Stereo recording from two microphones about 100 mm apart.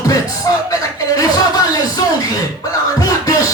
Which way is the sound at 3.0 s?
35° left (ahead or behind).